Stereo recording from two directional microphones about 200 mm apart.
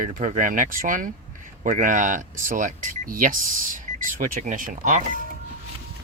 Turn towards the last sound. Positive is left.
turn(degrees=-40)  # may be behind; listen again after turning